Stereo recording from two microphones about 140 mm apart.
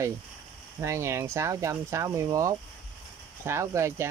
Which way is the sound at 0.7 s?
20° right (ahead or behind).